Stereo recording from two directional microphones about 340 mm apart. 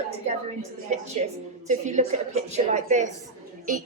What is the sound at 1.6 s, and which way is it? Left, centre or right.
A woman's voice, right.